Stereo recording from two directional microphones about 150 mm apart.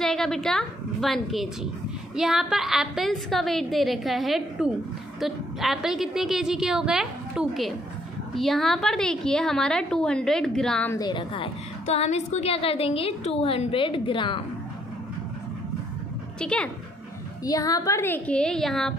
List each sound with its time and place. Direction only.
0.0 s a woman's voice: 5° left (ahead or behind)
10.9 s a woman's voice: 25° left (ahead or behind)
11.8 s a woman's voice: 45° left (ahead or behind)
16.3 s a woman's voice: 5° left (ahead or behind)
17.5 s a woman's voice: 25° left (ahead or behind); by 18.9 s centre (ahead or behind)